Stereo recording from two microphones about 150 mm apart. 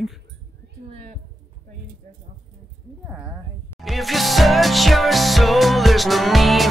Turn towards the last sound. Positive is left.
turn(degrees=0)  # may be behind; listen again after turning